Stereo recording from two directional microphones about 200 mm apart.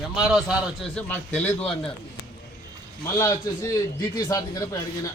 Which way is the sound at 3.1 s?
15° left (ahead or behind).